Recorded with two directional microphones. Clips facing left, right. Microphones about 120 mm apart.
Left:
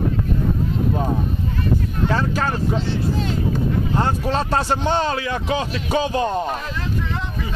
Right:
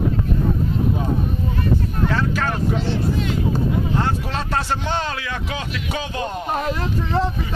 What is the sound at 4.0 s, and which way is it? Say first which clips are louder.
Speech: left 3 dB; 35° left (ahead or behind).